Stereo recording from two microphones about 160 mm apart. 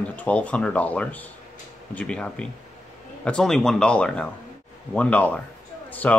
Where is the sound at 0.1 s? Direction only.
10° left (ahead or behind).